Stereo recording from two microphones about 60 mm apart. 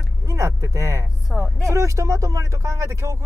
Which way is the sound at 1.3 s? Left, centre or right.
Centre.